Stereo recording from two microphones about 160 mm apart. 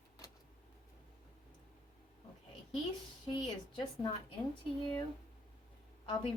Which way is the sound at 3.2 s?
30° left (ahead or behind).